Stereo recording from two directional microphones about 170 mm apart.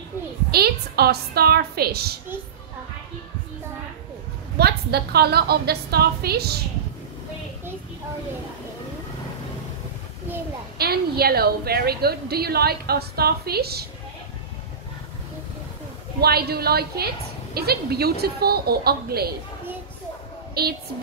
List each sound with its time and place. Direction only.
0.5 s a woman's voice: 65° right (ahead or behind)
4.6 s a woman's voice: 70° right (ahead or behind)
10.8 s a woman's voice: 65° right (ahead or behind)
16.2 s a woman's voice: 65° right (ahead or behind)
20.6 s a woman's voice: 65° right (ahead or behind)